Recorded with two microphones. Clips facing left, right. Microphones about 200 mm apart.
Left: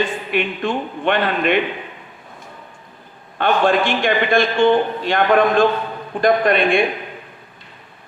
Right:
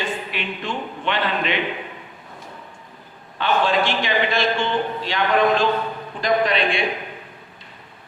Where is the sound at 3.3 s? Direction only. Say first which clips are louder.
Left 4 dB; 55° left (ahead or behind).